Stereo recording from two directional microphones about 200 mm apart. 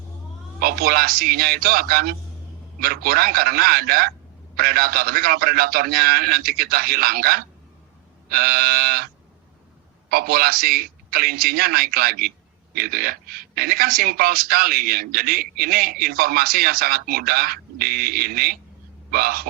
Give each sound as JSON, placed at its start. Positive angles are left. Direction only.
{"t": 0.6, "sound": "a woman's voice", "side_deg": -50}
{"t": 10.1, "sound": "a woman's voice", "side_deg": -50}